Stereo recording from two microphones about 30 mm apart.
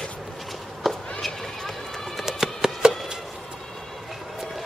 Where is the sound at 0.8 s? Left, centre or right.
Centre.